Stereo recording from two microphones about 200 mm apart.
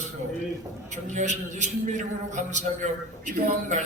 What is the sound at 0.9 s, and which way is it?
A man's voice, 35° right (ahead or behind).